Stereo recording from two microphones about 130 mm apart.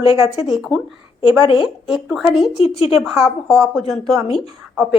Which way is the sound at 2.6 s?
50° left (ahead or behind).